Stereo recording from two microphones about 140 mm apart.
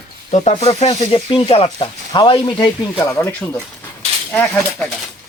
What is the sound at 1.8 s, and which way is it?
Frying, 35° left (ahead or behind).